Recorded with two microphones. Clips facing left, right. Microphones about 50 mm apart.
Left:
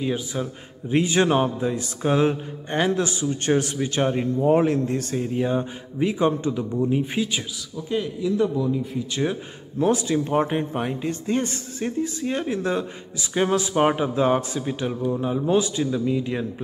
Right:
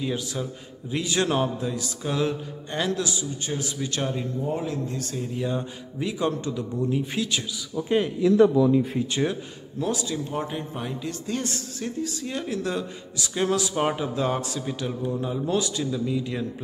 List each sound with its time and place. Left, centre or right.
0.0 s a man's voice: centre
0.8 s mantra: left
3.4 s speech: left
3.7 s speech: left
4.1 s speech: left; by 7.4 s centre
7.7 s speech: right
8.2 s speech: right
9.8 s speech: left